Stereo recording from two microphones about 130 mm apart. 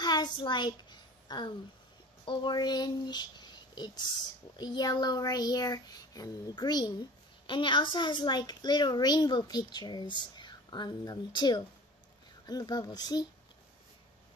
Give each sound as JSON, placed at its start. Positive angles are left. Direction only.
{"t": 0.0, "sound": "a sound", "side_deg": 35}
{"t": 2.2, "sound": "speech", "side_deg": 35}
{"t": 4.6, "sound": "child singing", "side_deg": 30}
{"t": 10.3, "sound": "speech", "side_deg": 35}
{"t": 12.4, "sound": "child singing", "side_deg": 30}